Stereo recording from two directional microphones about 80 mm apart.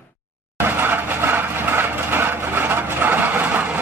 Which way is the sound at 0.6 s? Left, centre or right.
Right.